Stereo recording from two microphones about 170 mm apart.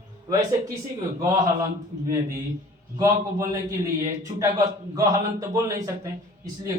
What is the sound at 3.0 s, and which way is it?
Speech, 20° right (ahead or behind).